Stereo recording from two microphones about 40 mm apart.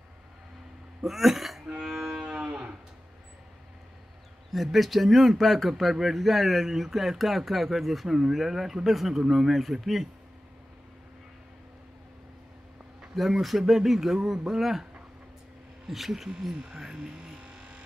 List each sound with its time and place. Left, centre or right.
1.0 s speech: centre
1.8 s cattle: centre; by 2.7 s right
4.5 s speech: centre
13.1 s a man's voice: centre
15.9 s speech: centre
16.6 s a man's voice: centre